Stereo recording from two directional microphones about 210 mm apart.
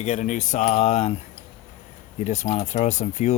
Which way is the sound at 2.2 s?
35° left (ahead or behind).